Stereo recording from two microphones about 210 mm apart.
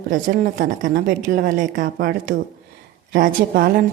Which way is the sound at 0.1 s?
40° right (ahead or behind).